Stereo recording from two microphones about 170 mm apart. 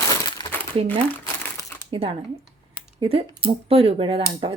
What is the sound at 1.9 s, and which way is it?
Speech, 30° right (ahead or behind).